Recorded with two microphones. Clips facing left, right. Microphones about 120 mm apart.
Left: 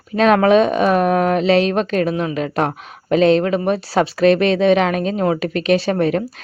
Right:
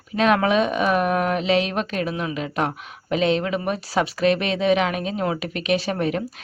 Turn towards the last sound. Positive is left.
turn(degrees=35)  # may be behind; listen again after turning